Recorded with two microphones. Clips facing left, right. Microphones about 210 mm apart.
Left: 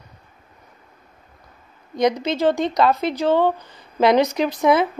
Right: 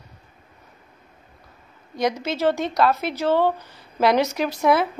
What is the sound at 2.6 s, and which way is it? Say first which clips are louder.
Speech: left 2 dB; 5° right (ahead or behind).